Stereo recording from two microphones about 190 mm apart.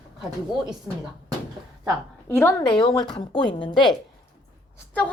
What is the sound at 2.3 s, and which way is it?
Speech, 10° left (ahead or behind).